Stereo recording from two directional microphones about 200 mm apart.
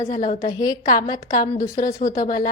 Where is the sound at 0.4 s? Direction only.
20° left (ahead or behind).